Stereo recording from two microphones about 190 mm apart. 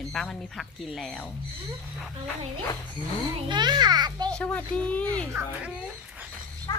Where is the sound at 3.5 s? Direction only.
25° right (ahead or behind).